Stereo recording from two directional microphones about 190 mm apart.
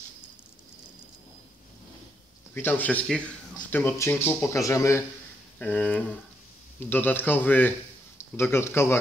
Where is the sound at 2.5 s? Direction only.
10° left (ahead or behind).